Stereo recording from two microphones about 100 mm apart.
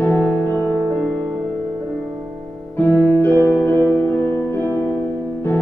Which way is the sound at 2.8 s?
15° left (ahead or behind).